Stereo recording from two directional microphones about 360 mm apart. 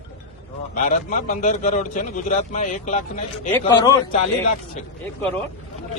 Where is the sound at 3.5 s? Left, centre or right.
Centre.